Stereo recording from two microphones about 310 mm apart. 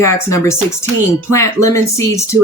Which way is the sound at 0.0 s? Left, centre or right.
Centre.